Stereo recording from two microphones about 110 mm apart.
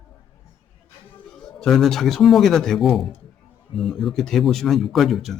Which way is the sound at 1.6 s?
5° left (ahead or behind).